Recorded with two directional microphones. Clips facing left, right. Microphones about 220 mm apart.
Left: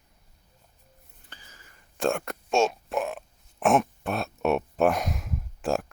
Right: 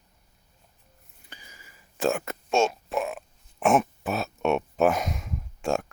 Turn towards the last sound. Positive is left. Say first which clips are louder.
# even
turn(degrees=0)  # may be behind; listen again after turning